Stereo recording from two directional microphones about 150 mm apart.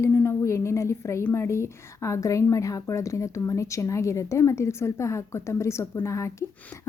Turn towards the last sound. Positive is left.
turn(degrees=20)  # may be behind; listen again after turning